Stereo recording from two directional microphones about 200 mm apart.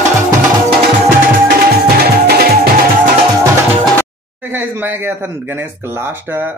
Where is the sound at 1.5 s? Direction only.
50° right (ahead or behind).